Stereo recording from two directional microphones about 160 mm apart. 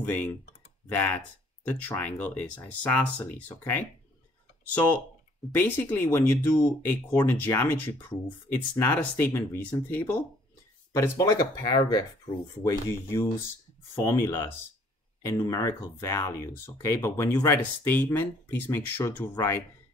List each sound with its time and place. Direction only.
0.0 s speech: 10° left (ahead or behind)
5.5 s speech: 10° left (ahead or behind)
10.9 s speech: 25° left (ahead or behind)